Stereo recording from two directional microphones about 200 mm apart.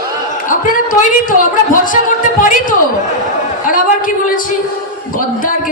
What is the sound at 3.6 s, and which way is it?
Speech, 40° left (ahead or behind).